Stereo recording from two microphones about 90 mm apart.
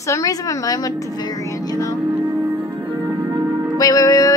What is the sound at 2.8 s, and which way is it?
Music, 25° right (ahead or behind).